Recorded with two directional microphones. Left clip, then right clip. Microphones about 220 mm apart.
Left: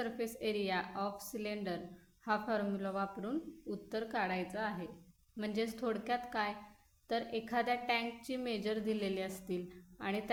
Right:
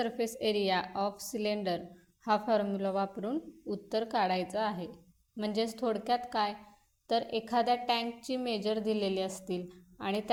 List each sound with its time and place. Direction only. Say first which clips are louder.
0.0 s a woman's voice: right 6 dB; 25° right (ahead or behind)